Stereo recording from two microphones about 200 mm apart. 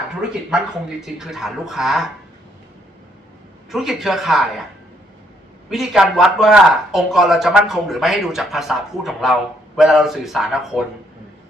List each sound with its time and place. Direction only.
1.0 s speech: centre (ahead or behind)
3.7 s speech: centre (ahead or behind)
5.7 s speech: centre (ahead or behind)